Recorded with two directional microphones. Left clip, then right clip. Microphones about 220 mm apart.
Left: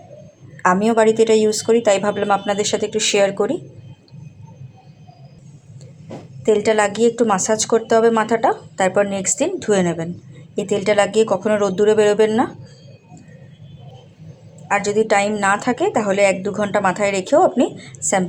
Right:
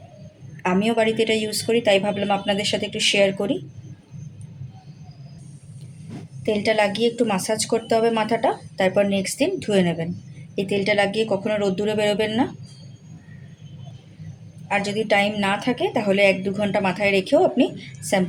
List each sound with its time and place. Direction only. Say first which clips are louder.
0.6 s speech: left 6 dB; 15° left (ahead or behind)
6.4 s speech: left 4 dB; 15° left (ahead or behind)
14.7 s speech: left 5 dB; 15° left (ahead or behind)